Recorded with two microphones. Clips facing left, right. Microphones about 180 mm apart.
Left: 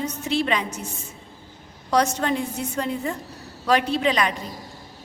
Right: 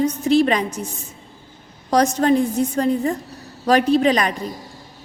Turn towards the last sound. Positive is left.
turn(degrees=-40)  # may be behind; listen again after turning